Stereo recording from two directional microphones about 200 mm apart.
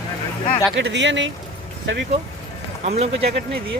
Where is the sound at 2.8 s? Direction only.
30° right (ahead or behind).